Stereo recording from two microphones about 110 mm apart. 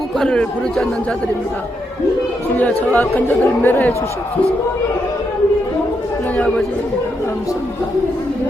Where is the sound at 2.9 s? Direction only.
15° left (ahead or behind).